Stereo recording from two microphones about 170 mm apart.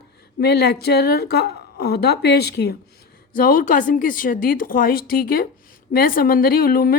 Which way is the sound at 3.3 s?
55° left (ahead or behind).